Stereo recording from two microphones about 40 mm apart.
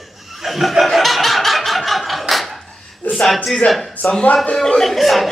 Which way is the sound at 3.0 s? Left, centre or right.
Left.